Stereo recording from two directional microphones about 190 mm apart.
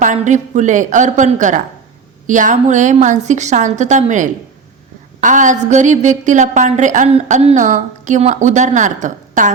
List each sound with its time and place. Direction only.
0.0 s a woman's voice: 40° right (ahead or behind)